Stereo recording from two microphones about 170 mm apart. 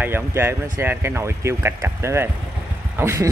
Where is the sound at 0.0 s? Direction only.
15° right (ahead or behind).